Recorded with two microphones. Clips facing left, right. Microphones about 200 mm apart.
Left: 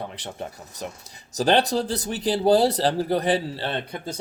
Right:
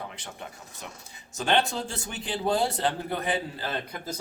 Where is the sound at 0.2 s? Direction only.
35° left (ahead or behind).